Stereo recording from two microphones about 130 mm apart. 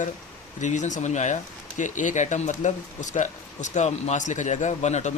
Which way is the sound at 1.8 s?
75° left (ahead or behind).